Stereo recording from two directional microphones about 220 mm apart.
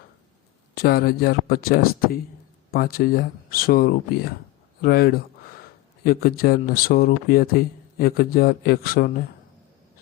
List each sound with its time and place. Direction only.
0.8 s speech: 45° left (ahead or behind)
4.8 s a sound: 45° left (ahead or behind)
6.1 s speech: 45° left (ahead or behind)